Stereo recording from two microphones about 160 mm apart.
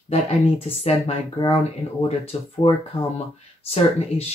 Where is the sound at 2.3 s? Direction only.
35° left (ahead or behind).